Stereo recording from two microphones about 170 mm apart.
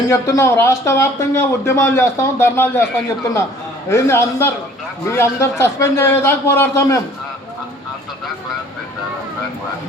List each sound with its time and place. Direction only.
0.1 s speech: 20° left (ahead or behind)
3.8 s speech: 15° left (ahead or behind)